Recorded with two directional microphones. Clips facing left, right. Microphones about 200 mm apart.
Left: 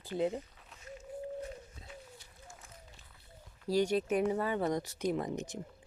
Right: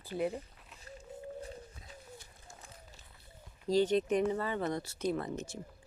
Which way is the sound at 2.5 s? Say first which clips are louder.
Even; 35° right (ahead or behind).